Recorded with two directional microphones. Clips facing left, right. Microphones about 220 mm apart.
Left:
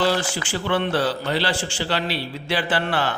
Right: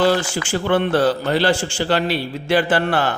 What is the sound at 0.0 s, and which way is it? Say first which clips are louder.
A man's voice: right 4 dB; 50° right (ahead or behind).